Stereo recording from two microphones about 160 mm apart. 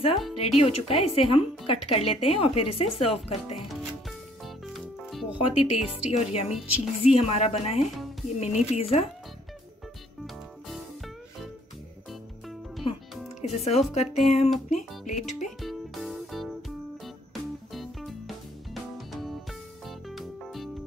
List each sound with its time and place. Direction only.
0.4 s speech: 40° left (ahead or behind)
3.3 s speech: centre (ahead or behind)
4.6 s music: centre (ahead or behind)
5.5 s speech: 45° left (ahead or behind)
12.1 s music: centre (ahead or behind)
13.4 s speech: 40° left (ahead or behind)
15.2 s music: centre (ahead or behind)